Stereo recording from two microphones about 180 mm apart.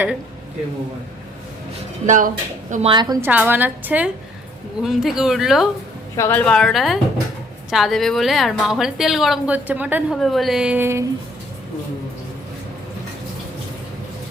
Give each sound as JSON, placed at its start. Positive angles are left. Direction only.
{"t": 2.0, "sound": "speech", "side_deg": -45}
{"t": 2.9, "sound": "a woman's voice", "side_deg": -25}
{"t": 3.2, "sound": "a woman's voice", "side_deg": -10}
{"t": 6.1, "sound": "a woman's voice", "side_deg": 15}
{"t": 6.4, "sound": "a woman's voice", "side_deg": 5}